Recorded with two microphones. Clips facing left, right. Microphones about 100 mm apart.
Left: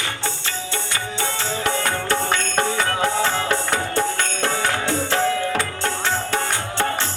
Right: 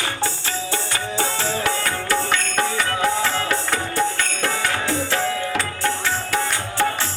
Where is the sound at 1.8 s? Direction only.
25° left (ahead or behind).